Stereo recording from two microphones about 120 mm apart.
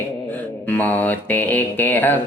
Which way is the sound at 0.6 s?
15° left (ahead or behind).